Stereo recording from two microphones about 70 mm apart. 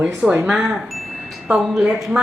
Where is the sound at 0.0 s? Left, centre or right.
Centre.